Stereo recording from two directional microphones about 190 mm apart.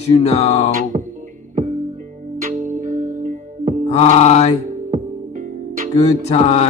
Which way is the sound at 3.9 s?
35° left (ahead or behind).